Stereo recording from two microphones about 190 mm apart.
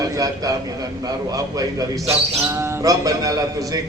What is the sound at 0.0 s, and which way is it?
A man's voice, 20° right (ahead or behind).